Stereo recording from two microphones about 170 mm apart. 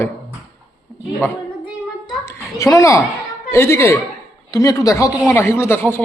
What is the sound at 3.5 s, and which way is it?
Speech, 15° left (ahead or behind).